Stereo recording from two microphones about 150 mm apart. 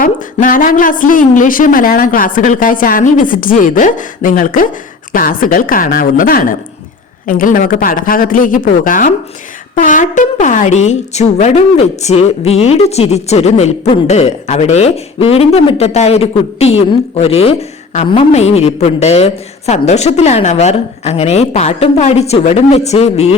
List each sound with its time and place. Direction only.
0.0 s a woman's voice: 60° left (ahead or behind); by 23.3 s 45° left (ahead or behind)